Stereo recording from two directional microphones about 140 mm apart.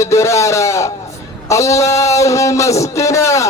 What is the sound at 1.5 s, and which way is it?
Speech, 20° left (ahead or behind).